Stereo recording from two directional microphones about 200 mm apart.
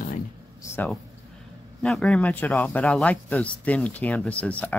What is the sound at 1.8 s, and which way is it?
Speech, 5° left (ahead or behind).